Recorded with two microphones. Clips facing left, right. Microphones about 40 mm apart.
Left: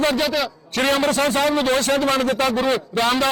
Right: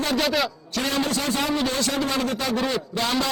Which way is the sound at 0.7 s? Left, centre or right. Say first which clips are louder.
Left 8 dB; left.